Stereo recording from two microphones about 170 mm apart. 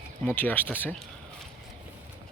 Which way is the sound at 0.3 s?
10° left (ahead or behind).